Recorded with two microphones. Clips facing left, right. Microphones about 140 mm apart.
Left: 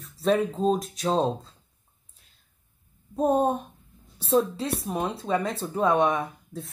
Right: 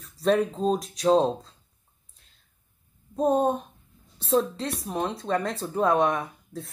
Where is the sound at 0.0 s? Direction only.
Centre (ahead or behind).